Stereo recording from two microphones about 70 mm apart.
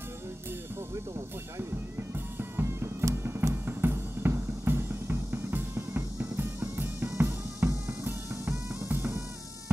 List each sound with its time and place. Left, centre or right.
1.6 s music: right